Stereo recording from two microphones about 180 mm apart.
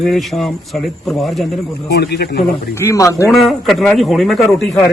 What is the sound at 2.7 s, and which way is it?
Speech, 15° left (ahead or behind).